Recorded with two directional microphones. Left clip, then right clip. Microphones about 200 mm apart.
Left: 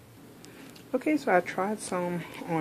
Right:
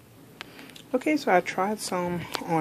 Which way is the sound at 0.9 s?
15° right (ahead or behind).